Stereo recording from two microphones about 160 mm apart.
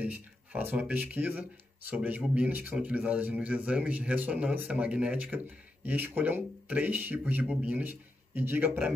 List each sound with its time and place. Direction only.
0.0 s a man's voice: 10° right (ahead or behind)